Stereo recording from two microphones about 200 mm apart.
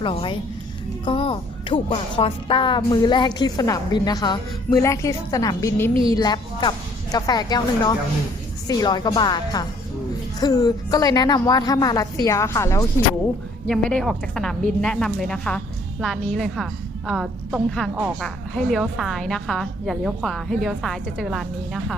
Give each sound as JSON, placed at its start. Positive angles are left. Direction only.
{"t": 0.0, "sound": "a woman's voice", "side_deg": 25}
{"t": 5.9, "sound": "speech", "side_deg": -25}
{"t": 6.1, "sound": "a woman's voice", "side_deg": 20}
{"t": 13.7, "sound": "a woman's voice", "side_deg": 5}